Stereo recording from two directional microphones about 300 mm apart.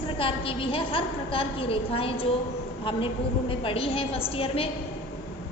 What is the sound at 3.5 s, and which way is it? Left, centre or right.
A woman's voice, centre.